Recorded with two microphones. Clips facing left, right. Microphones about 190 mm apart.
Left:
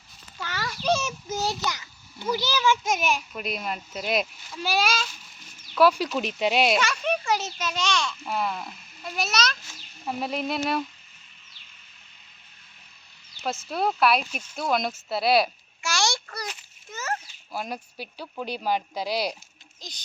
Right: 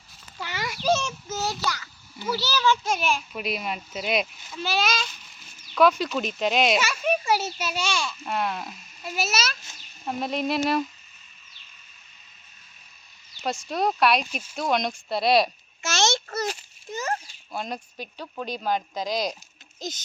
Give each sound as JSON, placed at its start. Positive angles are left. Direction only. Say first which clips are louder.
{"t": 0.3, "sound": "a sound", "louder": "right 1 dB", "side_deg": -15}
{"t": 0.9, "sound": "child singing", "louder": "right 1 dB", "side_deg": 0}
{"t": 1.3, "sound": "a sound", "louder": "left 1 dB", "side_deg": 15}
{"t": 2.3, "sound": "speech", "louder": "even", "side_deg": 15}
{"t": 3.3, "sound": "speech", "louder": "right 1 dB", "side_deg": 0}
{"t": 4.6, "sound": "speech", "louder": "left 1 dB", "side_deg": 10}
{"t": 6.7, "sound": "a child's voice", "louder": "right 1 dB", "side_deg": -5}
{"t": 13.4, "sound": "speech", "louder": "right 1 dB", "side_deg": 0}
{"t": 15.8, "sound": "a child's voice", "louder": "right 3 dB", "side_deg": -20}
{"t": 16.3, "sound": "a sound", "louder": "right 8 dB", "side_deg": -45}
{"t": 17.5, "sound": "speech", "louder": "right 1 dB", "side_deg": 10}